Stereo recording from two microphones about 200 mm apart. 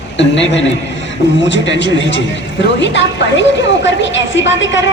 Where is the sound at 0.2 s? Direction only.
65° left (ahead or behind).